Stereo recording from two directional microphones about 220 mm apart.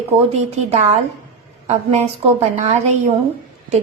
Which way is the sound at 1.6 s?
30° right (ahead or behind).